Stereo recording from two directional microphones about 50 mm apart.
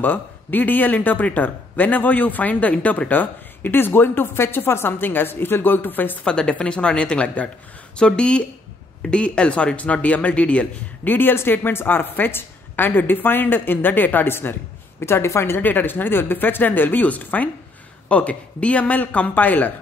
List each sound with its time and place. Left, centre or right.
0.0 s a man's voice: left
6.2 s a woman's voice: centre
11.1 s a woman's voice: left
15.0 s a woman's voice: left
15.6 s a man's voice: left